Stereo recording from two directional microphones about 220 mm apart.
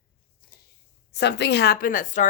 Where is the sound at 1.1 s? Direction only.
50° left (ahead or behind).